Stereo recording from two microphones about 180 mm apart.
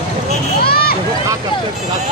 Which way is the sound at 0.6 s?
55° left (ahead or behind).